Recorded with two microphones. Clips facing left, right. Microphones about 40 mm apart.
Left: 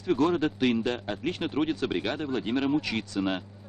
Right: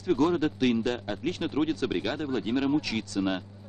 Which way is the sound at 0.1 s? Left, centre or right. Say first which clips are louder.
Even; centre.